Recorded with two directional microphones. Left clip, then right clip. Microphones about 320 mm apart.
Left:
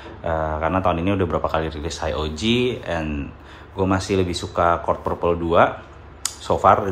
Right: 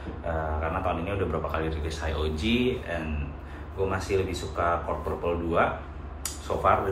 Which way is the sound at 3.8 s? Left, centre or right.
Centre.